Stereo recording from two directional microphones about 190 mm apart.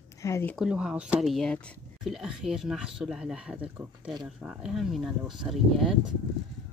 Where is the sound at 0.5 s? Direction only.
5° right (ahead or behind).